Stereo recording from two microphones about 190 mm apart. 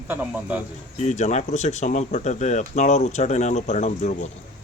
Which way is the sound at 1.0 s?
35° left (ahead or behind).